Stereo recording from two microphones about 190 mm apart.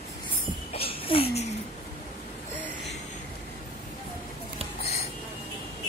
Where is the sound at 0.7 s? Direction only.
30° left (ahead or behind).